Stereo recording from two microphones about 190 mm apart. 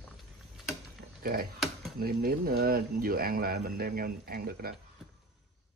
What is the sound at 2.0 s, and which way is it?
Speech, 50° right (ahead or behind).